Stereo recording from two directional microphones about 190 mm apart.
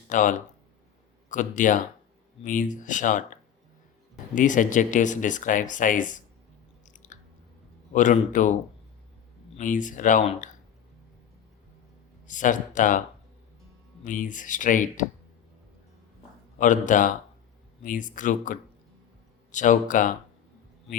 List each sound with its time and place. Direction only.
0.1 s speech: 40° left (ahead or behind)
4.4 s speech: 40° left (ahead or behind)
6.8 s chewing: 40° left (ahead or behind)
7.9 s speech: 40° left (ahead or behind)
9.6 s speech: 40° left (ahead or behind)
12.3 s speech: 40° left (ahead or behind)
14.0 s speech: 45° left (ahead or behind)
16.6 s speech: 40° left (ahead or behind)